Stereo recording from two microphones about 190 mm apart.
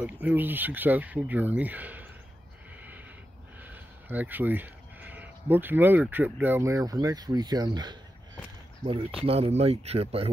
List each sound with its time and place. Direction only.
0.0 s speech: 10° right (ahead or behind)
4.1 s speech: 10° right (ahead or behind)
9.2 s speech: 30° right (ahead or behind)